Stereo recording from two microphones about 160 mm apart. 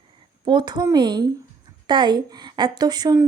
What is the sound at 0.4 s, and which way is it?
A woman's voice, 30° right (ahead or behind).